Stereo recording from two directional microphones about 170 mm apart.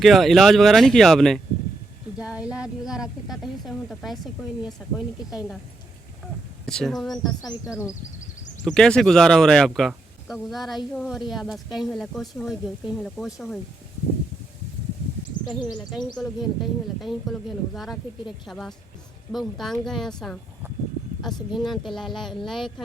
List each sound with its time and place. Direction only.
0.0 s a woman's voice: centre (ahead or behind)
6.7 s a woman's voice: 5° left (ahead or behind)
7.2 s speech: 25° left (ahead or behind)
8.6 s a woman's voice: 5° left (ahead or behind)
16.1 s a woman's voice: centre (ahead or behind)
21.5 s a woman's voice: centre (ahead or behind)